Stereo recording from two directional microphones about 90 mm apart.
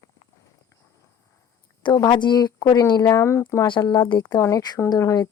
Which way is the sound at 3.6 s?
60° left (ahead or behind).